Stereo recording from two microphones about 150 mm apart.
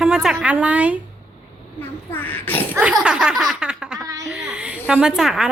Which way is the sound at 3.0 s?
5° right (ahead or behind).